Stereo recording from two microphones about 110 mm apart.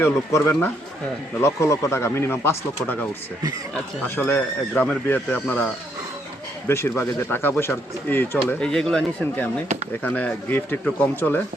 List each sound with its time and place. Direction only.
0.0 s speech: 25° left (ahead or behind)
4.2 s speech: 15° left (ahead or behind)
8.4 s speech: 5° left (ahead or behind)
10.0 s speech: 15° left (ahead or behind)